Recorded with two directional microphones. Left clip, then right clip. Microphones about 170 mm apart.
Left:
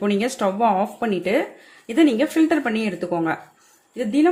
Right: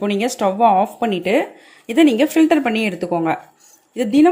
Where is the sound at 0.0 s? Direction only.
10° right (ahead or behind).